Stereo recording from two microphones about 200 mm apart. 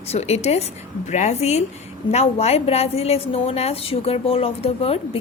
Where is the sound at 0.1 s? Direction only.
30° left (ahead or behind).